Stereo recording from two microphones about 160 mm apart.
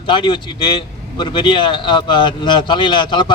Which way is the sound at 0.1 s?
30° left (ahead or behind).